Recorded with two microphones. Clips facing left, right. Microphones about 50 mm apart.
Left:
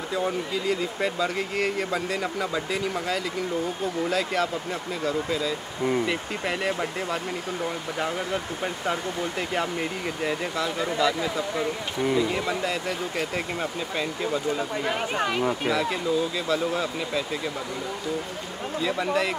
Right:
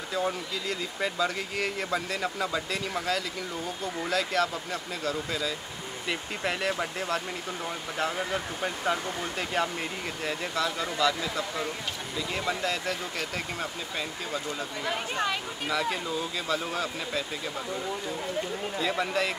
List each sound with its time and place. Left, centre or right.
0.1 s speech: centre
10.2 s speech: centre
15.7 s speech: centre
18.8 s speech: centre